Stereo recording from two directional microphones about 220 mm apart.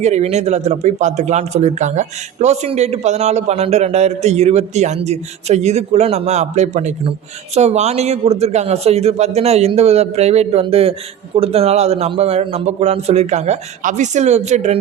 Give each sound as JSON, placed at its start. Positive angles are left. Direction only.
{"t": 0.0, "sound": "a man's voice", "side_deg": -30}